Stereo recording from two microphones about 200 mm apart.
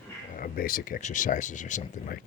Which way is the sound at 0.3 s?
45° left (ahead or behind).